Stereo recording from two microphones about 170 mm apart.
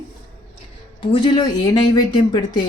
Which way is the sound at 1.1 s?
25° left (ahead or behind).